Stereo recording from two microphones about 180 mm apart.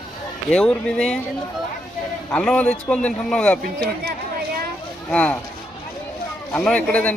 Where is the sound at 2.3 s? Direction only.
5° left (ahead or behind).